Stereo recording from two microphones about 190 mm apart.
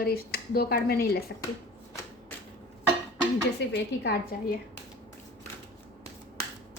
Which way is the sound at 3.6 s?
60° left (ahead or behind).